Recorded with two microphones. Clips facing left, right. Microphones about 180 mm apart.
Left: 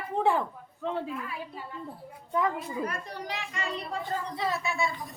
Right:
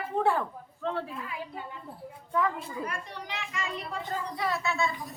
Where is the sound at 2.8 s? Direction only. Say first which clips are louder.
Left 3 dB; 40° left (ahead or behind).